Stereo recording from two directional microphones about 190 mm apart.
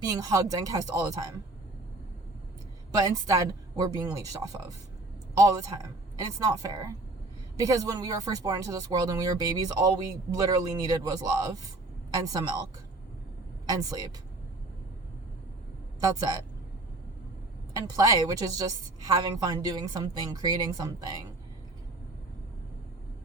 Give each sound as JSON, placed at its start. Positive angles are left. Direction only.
{"t": 0.1, "sound": "a woman's voice", "side_deg": -20}
{"t": 3.0, "sound": "a woman's voice", "side_deg": -20}
{"t": 13.7, "sound": "a woman's voice", "side_deg": -20}
{"t": 16.0, "sound": "speech", "side_deg": -20}
{"t": 17.7, "sound": "a woman's voice", "side_deg": -20}